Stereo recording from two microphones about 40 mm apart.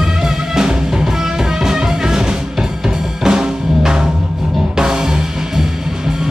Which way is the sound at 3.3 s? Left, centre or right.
Centre.